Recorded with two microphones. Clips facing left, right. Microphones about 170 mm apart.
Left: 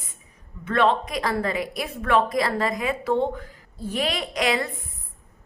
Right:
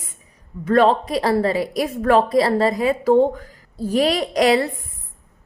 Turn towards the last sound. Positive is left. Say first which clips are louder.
# right 8 dB
turn(degrees=-35)  # may be behind; listen again after turning